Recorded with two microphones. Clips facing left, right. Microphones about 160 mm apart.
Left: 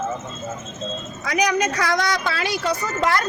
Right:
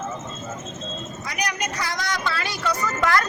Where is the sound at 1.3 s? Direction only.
90° left.